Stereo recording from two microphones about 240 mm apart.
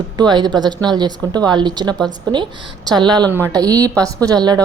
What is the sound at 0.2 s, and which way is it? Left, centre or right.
Speech, centre.